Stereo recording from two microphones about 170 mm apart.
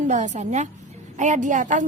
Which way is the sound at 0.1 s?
45° right (ahead or behind).